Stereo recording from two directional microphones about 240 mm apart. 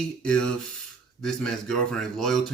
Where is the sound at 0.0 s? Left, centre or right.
Centre.